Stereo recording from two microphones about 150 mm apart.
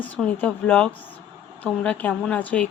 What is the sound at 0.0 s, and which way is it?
A woman's voice, 10° left (ahead or behind).